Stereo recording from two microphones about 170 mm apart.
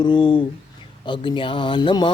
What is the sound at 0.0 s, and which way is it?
Mantra, 25° left (ahead or behind).